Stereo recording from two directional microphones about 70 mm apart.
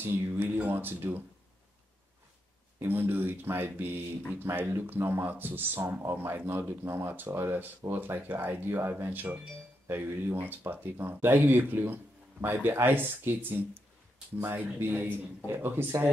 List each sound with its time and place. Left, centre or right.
0.0 s a man's voice: right
2.8 s a man's voice: right